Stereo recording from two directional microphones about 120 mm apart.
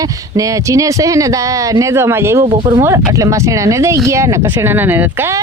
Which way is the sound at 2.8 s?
25° right (ahead or behind).